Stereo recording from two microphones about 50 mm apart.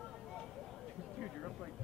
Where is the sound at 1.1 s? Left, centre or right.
Centre.